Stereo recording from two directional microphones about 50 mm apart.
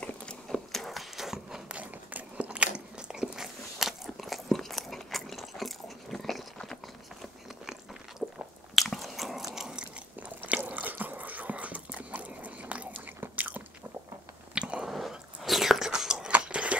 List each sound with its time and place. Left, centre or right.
0.0 s a sound: centre
0.7 s a sound: centre
1.7 s biting: right; by 7.2 s centre
8.2 s biting: centre
8.7 s biting: centre
9.5 s biting: centre
10.6 s drip: right
13.2 s biting: right
14.5 s biting: right
14.9 s biting: centre
16.3 s chewing: right